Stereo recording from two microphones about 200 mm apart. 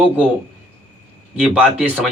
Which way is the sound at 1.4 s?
5° right (ahead or behind).